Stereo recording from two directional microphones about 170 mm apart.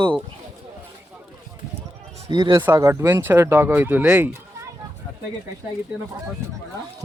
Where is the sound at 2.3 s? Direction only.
25° right (ahead or behind); by 4.3 s 10° right (ahead or behind).